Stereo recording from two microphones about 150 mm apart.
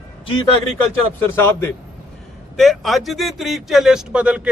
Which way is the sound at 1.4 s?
15° left (ahead or behind).